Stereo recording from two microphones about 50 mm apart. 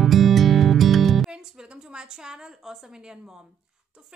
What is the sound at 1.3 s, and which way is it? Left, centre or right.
A woman's voice, centre.